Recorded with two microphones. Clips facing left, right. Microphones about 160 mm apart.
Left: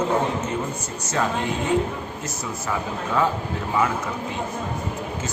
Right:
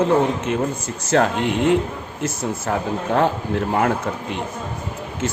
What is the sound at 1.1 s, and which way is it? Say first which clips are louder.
Speech: right 6 dB; 75° right (ahead or behind).